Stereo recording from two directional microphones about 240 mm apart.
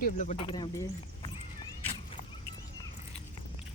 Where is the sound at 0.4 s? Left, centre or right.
Centre.